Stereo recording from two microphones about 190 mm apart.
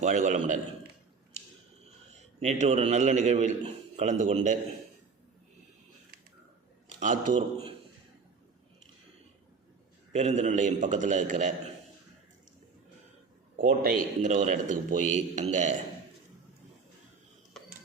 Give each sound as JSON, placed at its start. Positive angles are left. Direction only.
{"t": 0.0, "sound": "a man's voice", "side_deg": -40}
{"t": 2.0, "sound": "a man's voice", "side_deg": -35}
{"t": 6.8, "sound": "a man's voice", "side_deg": -40}
{"t": 10.2, "sound": "a man's voice", "side_deg": -40}
{"t": 13.6, "sound": "a man's voice", "side_deg": -45}